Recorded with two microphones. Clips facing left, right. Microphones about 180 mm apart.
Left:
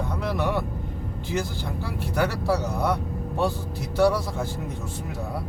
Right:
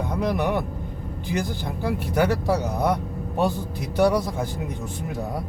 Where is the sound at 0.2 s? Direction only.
15° right (ahead or behind).